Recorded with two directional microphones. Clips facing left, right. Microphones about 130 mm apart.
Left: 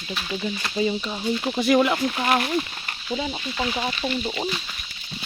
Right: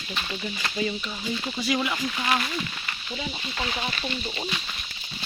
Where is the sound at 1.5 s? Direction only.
55° left (ahead or behind).